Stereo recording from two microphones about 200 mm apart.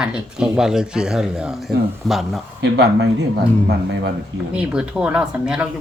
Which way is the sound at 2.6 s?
60° right (ahead or behind).